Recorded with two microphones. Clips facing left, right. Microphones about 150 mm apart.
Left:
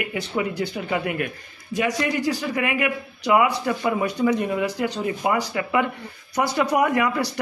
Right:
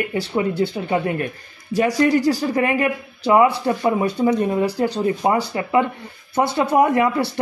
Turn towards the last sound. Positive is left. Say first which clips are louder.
# right 4 dB
turn(degrees=-25)  # may be behind; listen again after turning